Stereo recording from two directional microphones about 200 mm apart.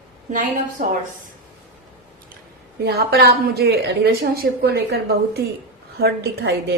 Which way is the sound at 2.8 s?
55° right (ahead or behind).